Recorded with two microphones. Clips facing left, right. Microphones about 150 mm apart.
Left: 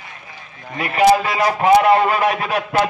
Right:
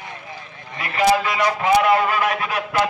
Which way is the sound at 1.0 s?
30° left (ahead or behind).